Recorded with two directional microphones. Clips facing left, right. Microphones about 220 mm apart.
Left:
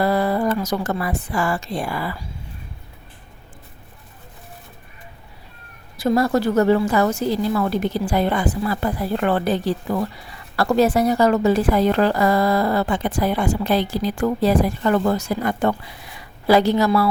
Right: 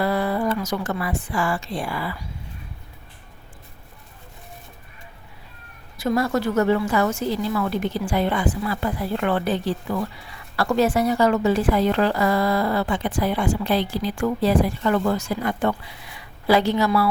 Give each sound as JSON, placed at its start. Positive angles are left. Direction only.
{"t": 0.0, "sound": "a woman's voice", "side_deg": 40}
{"t": 6.0, "sound": "a woman's voice", "side_deg": 35}